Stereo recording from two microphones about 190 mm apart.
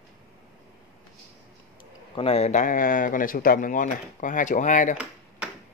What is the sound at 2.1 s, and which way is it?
Speech, 30° left (ahead or behind).